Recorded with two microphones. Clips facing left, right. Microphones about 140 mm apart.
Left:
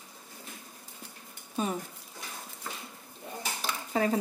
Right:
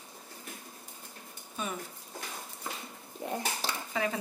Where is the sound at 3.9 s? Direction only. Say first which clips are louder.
Left 6 dB; 40° left (ahead or behind).